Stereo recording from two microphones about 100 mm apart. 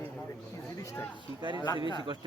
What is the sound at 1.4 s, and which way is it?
Speech, 50° right (ahead or behind).